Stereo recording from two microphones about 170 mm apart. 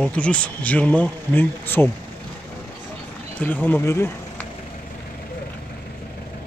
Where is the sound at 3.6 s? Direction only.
15° left (ahead or behind).